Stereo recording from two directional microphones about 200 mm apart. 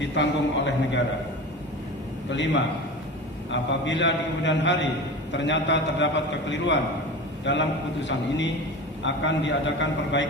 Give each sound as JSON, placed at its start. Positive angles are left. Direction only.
{"t": 0.0, "sound": "a man's voice", "side_deg": 65}
{"t": 2.3, "sound": "a man's voice", "side_deg": 65}
{"t": 7.4, "sound": "a man's voice", "side_deg": 65}